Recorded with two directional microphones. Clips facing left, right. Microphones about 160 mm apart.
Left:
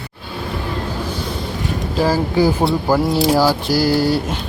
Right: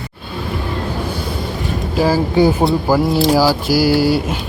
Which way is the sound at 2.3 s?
20° right (ahead or behind).